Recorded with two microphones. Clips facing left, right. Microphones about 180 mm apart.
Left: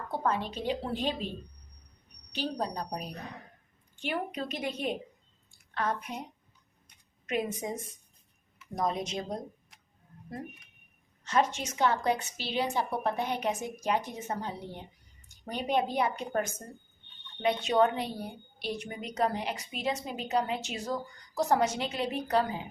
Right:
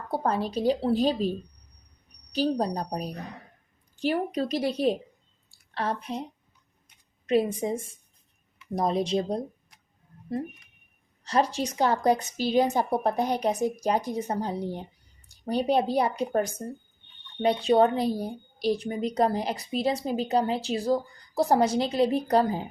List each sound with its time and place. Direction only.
0.1 s a woman's voice: 35° right (ahead or behind)
2.3 s a woman's voice: 40° right (ahead or behind)
5.5 s a sound: 30° right (ahead or behind)
7.3 s a woman's voice: 30° right (ahead or behind)